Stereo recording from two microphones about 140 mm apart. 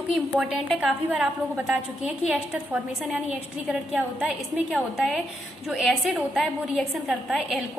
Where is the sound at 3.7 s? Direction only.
5° right (ahead or behind).